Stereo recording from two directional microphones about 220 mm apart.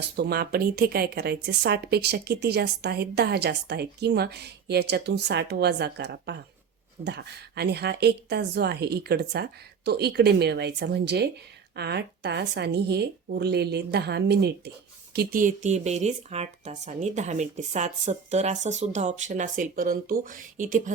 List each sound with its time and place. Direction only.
0.0 s speech: 50° right (ahead or behind)